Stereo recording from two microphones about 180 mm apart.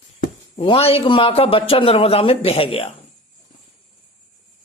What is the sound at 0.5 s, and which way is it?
Speech, 30° left (ahead or behind).